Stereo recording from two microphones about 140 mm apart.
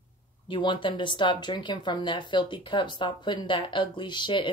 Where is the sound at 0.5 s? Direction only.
35° left (ahead or behind).